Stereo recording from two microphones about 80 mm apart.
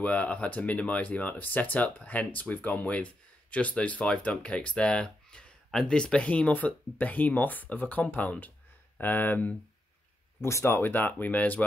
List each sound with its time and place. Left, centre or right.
0.0 s speech: centre
10.4 s speech: left